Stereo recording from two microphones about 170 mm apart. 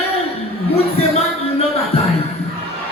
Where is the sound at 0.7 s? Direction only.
35° left (ahead or behind).